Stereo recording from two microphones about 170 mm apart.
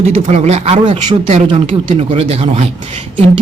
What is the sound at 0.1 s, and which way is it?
A woman's voice, 40° right (ahead or behind).